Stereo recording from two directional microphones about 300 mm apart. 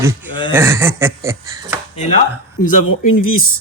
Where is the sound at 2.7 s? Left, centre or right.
Left.